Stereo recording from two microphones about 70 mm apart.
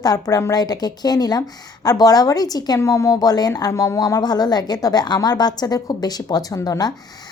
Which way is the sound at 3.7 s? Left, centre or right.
Left.